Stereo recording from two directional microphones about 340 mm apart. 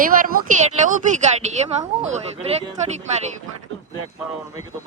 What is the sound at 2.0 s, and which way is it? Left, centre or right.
Speech, centre.